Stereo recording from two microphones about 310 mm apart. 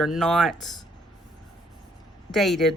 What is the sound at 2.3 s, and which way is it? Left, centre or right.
Speech, centre.